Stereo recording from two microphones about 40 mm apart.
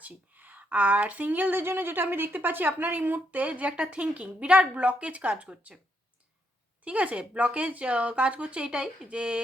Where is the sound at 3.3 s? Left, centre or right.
Right.